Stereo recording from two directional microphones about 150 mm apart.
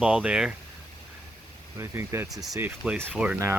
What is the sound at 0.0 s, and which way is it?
Speech, 5° right (ahead or behind).